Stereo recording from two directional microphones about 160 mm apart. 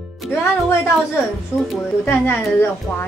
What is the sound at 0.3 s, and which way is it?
Speech, 15° left (ahead or behind).